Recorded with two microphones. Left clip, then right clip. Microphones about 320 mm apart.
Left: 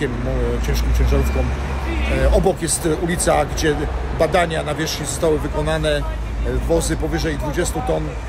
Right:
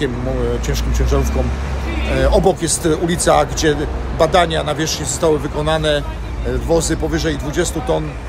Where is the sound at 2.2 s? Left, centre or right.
Centre.